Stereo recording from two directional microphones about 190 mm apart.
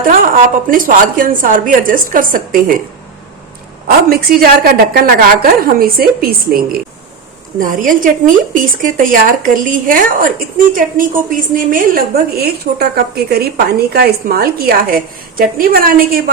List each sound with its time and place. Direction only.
0.1 s a woman's voice: 45° right (ahead or behind)
3.8 s a woman's voice: 50° right (ahead or behind)